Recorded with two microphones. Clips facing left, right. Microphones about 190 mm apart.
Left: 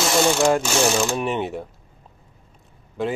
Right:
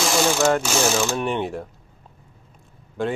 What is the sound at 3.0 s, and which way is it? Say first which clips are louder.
Speech: even; centre (ahead or behind).